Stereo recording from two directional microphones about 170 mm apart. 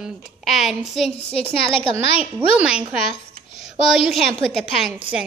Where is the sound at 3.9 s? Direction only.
Centre (ahead or behind).